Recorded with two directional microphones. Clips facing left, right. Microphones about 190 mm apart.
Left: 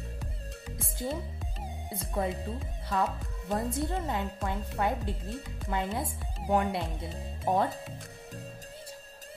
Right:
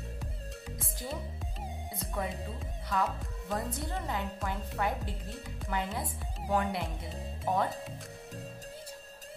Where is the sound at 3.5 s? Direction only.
25° left (ahead or behind).